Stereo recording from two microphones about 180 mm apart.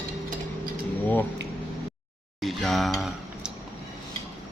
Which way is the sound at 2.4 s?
Centre (ahead or behind).